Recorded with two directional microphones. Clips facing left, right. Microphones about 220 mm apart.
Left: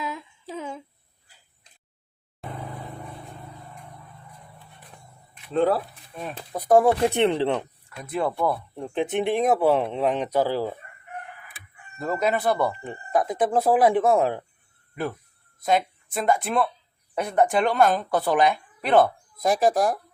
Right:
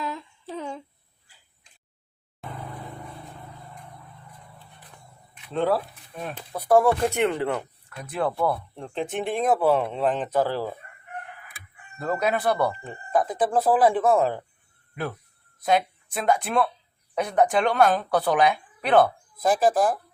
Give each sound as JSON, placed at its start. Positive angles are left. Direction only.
{"t": 0.0, "sound": "humming", "side_deg": 5}
{"t": 6.5, "sound": "speech", "side_deg": 15}
{"t": 7.3, "sound": "speech", "side_deg": 30}
{"t": 7.9, "sound": "speech", "side_deg": 0}
{"t": 11.9, "sound": "speech", "side_deg": 0}
{"t": 12.8, "sound": "speech", "side_deg": 20}
{"t": 15.6, "sound": "speech", "side_deg": 0}
{"t": 19.4, "sound": "speech", "side_deg": 15}
{"t": 19.7, "sound": "speech", "side_deg": 0}